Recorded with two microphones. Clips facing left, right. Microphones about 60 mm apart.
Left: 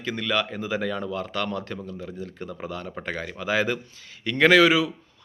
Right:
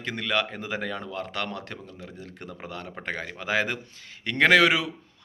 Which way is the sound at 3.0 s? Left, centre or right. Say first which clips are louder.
Even; right.